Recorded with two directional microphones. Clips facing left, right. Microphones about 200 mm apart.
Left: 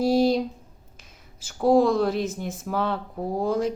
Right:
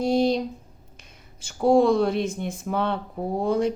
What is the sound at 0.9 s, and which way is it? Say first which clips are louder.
Speech: right 1 dB; centre (ahead or behind).